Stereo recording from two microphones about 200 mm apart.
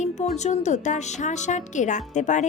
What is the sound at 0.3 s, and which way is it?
Speech, 35° left (ahead or behind).